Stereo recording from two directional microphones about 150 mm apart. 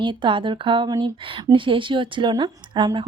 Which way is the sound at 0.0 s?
30° right (ahead or behind).